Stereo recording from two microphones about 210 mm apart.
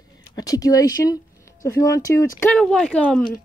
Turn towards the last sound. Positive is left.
turn(degrees=5)  # may be behind; listen again after turning